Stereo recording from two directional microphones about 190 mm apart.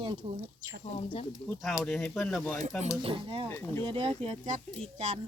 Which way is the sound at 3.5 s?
15° left (ahead or behind).